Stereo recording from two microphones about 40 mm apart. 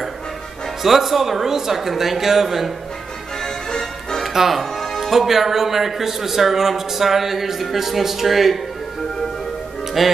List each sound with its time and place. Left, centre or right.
0.8 s speech: centre
4.2 s music: centre
4.6 s speech: centre
10.0 s music: centre